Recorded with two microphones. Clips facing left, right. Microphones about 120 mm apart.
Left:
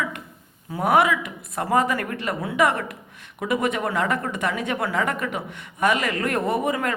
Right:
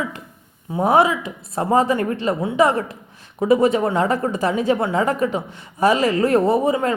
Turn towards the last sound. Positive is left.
turn(degrees=-30)  # may be behind; listen again after turning